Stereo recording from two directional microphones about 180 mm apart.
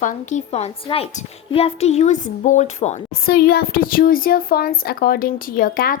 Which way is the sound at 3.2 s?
55° left (ahead or behind).